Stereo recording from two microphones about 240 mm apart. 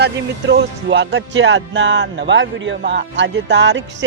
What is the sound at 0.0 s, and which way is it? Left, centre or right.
Speech, right.